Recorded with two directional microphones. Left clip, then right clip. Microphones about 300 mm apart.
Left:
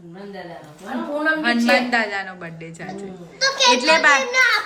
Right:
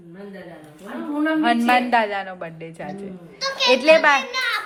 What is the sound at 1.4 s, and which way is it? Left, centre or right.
A woman's voice, centre.